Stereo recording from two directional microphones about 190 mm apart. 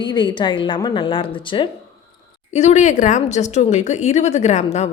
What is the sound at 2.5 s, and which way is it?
A woman's voice, 35° left (ahead or behind).